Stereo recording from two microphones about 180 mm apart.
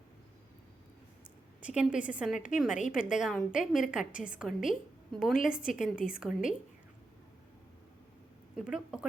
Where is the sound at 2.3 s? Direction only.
45° left (ahead or behind).